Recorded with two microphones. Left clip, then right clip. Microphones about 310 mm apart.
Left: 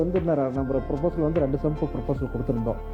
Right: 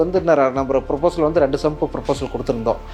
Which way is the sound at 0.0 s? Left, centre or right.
Centre.